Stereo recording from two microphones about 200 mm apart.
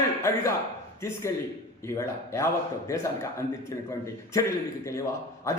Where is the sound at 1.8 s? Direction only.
15° left (ahead or behind).